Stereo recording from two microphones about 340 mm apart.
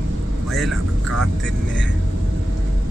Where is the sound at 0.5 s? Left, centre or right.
Centre.